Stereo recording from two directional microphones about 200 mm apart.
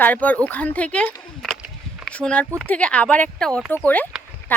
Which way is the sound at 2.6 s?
5° left (ahead or behind).